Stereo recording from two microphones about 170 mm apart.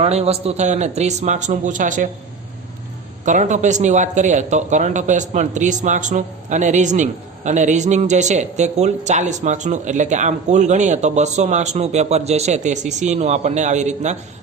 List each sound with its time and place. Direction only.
0.0 s speech: 40° right (ahead or behind)
3.2 s speech: 45° right (ahead or behind)